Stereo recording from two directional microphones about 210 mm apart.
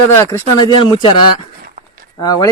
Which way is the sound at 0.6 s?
20° left (ahead or behind).